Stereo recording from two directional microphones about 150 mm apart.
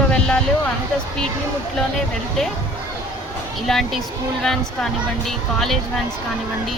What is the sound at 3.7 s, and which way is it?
Speech, centre (ahead or behind).